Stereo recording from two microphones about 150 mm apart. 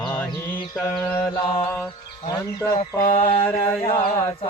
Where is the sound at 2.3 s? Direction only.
25° left (ahead or behind).